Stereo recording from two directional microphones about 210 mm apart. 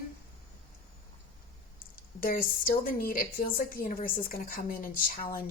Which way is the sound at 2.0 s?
45° left (ahead or behind).